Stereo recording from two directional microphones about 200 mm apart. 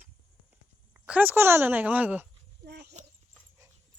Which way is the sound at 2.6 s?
55° right (ahead or behind).